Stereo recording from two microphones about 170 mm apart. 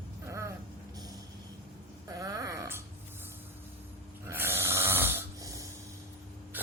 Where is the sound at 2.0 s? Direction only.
20° right (ahead or behind).